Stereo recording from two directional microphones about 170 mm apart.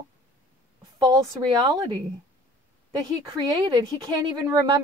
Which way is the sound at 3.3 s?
25° right (ahead or behind).